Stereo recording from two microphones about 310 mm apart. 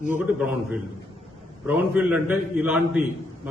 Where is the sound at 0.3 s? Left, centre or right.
Centre.